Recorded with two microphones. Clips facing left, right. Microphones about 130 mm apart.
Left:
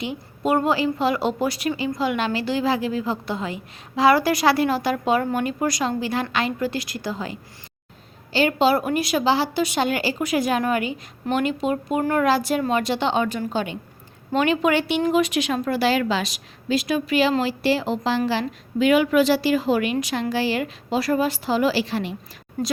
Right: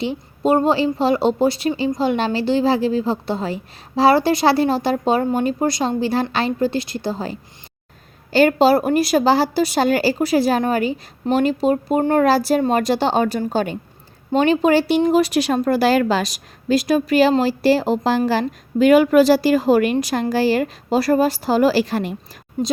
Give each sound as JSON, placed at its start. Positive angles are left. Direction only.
{"t": 0.0, "sound": "a woman's voice", "side_deg": -30}
{"t": 8.3, "sound": "a woman's voice", "side_deg": -45}